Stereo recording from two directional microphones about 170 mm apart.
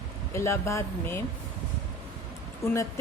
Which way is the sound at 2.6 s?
20° left (ahead or behind).